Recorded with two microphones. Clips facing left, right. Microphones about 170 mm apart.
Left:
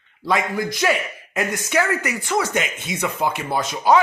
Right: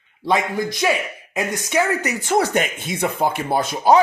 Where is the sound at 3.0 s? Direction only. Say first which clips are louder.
Right 3 dB; 35° right (ahead or behind).